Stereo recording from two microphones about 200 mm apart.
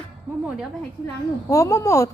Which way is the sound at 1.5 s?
15° left (ahead or behind).